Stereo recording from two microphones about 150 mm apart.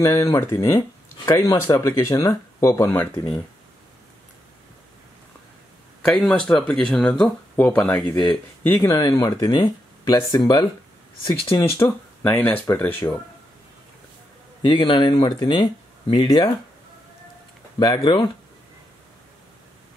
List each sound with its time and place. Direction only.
0.0 s speech: 20° left (ahead or behind)
6.0 s speech: 5° left (ahead or behind); by 10.7 s 25° left (ahead or behind)
11.8 s speech: 20° left (ahead or behind)
14.6 s speech: 30° left (ahead or behind)
17.7 s speech: 30° left (ahead or behind)